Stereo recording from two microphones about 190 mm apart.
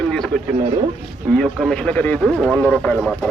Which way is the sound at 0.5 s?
25° right (ahead or behind).